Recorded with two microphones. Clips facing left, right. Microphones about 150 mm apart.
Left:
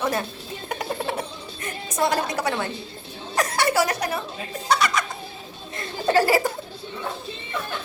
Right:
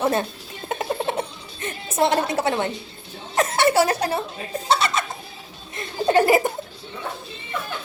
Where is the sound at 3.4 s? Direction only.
25° right (ahead or behind).